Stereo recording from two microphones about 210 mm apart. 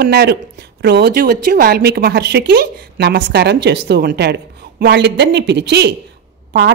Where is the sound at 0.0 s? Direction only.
50° right (ahead or behind).